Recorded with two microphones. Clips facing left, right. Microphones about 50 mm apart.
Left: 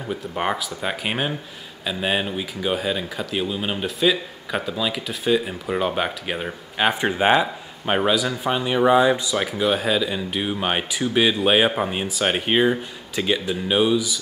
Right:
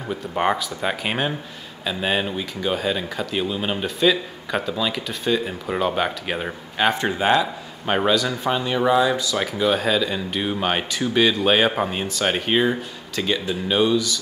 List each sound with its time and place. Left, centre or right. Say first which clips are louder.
0.4 s speech: right 4 dB; centre
6.8 s speech: left 1 dB; centre
8.1 s speech: right 1 dB; centre
9.4 s speech: right 1 dB; centre